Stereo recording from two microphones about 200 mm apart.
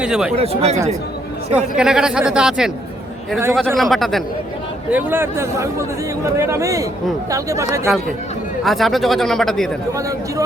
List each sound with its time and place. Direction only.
0.0 s speech: 5° right (ahead or behind)
0.3 s speech: 30° right (ahead or behind)
1.5 s speech: 5° right (ahead or behind)
8.6 s speech: centre (ahead or behind)